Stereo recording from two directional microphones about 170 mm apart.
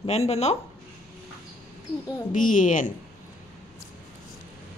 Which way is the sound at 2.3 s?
50° left (ahead or behind).